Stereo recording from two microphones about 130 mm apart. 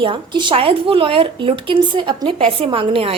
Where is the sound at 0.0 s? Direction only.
40° right (ahead or behind).